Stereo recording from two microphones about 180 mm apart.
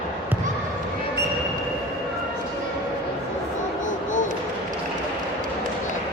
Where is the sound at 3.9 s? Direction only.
45° left (ahead or behind).